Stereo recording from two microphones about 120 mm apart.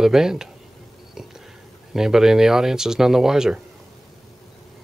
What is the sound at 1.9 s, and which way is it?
Speech, 5° right (ahead or behind).